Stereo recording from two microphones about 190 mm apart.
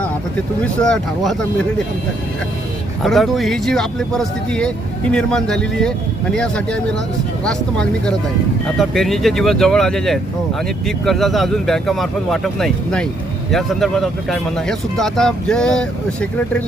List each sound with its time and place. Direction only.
0.6 s speech: 5° left (ahead or behind)
3.0 s speech: centre (ahead or behind)